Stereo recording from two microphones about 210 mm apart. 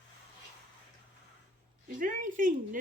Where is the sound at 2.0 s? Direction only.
40° right (ahead or behind).